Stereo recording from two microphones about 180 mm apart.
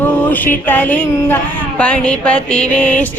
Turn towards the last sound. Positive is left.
turn(degrees=5)  # may be behind; listen again after turning